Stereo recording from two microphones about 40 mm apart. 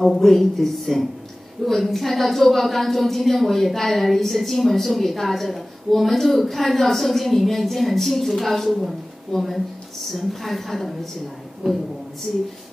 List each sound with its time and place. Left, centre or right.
0.0 s a woman's voice: centre
10.1 s a woman's voice: centre
11.6 s a woman's voice: centre
12.3 s speech: centre